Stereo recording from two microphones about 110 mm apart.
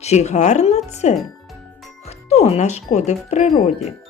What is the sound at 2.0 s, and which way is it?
Speech, 70° left (ahead or behind).